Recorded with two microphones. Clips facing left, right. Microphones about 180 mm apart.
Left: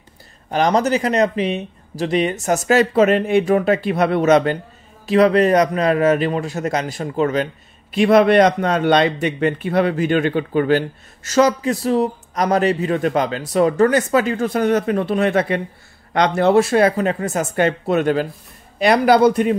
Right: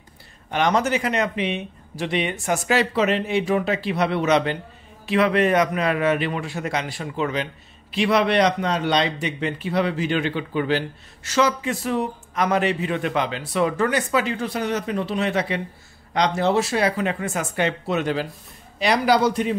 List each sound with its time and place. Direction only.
0.5 s a man's voice: 35° left (ahead or behind); by 19.5 s 55° left (ahead or behind)